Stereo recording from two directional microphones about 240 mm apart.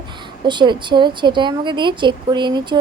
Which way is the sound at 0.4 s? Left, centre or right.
Centre.